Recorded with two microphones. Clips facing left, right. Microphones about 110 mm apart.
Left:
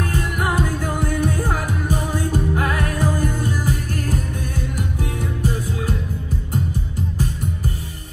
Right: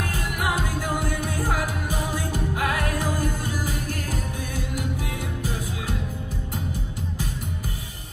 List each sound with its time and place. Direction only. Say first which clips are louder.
0.0 s music: left 4 dB; 45° left (ahead or behind)